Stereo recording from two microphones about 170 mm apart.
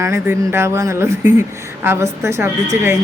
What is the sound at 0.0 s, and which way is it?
Speech, 15° right (ahead or behind).